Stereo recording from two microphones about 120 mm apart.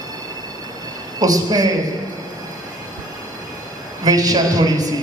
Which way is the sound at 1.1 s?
30° right (ahead or behind).